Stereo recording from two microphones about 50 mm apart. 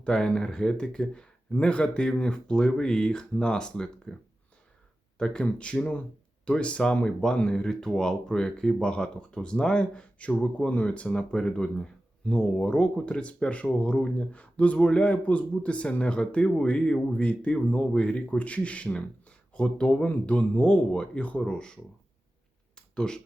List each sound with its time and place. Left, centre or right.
0.0 s speech: centre
5.1 s speech: centre
23.0 s speech: centre